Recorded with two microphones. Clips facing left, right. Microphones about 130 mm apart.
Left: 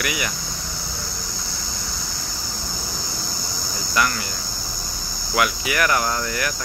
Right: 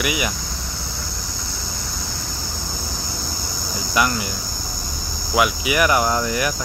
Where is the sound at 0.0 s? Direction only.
15° right (ahead or behind).